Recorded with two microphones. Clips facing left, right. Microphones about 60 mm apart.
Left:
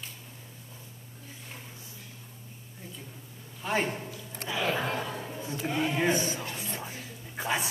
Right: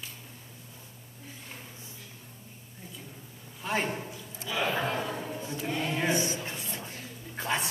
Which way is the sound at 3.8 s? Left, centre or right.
Centre.